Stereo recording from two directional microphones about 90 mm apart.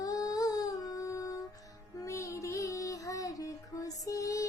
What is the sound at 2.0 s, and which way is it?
Child singing, 35° left (ahead or behind).